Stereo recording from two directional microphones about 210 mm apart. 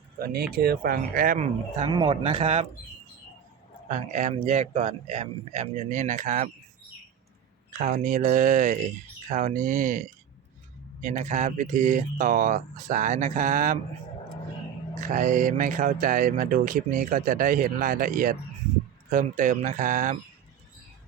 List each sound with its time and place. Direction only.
0.2 s speech: 45° right (ahead or behind)
1.8 s speech: 25° right (ahead or behind)
3.8 s speech: 35° right (ahead or behind)
7.8 s speech: 35° right (ahead or behind)
15.0 s speech: 40° right (ahead or behind)